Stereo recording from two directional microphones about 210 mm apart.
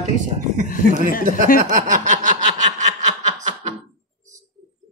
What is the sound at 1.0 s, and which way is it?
Speech, 40° left (ahead or behind).